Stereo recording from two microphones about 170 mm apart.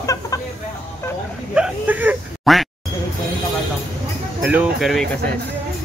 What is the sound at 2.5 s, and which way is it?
Speech, centre (ahead or behind).